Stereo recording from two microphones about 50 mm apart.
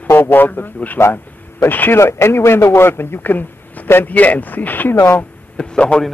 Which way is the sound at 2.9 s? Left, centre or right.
Left.